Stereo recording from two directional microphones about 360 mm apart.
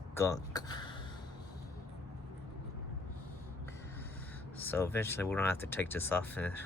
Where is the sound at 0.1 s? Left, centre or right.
Centre.